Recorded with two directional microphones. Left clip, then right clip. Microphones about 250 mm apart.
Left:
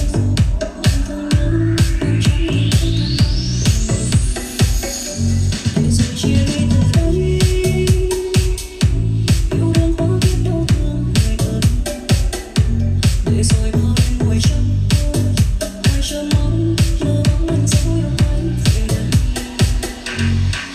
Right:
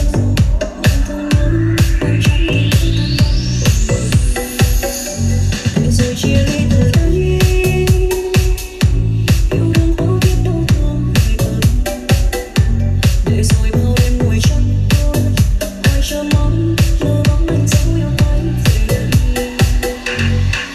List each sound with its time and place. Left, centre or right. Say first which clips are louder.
0.6 s music: right 4 dB; centre
9.7 s music: even; centre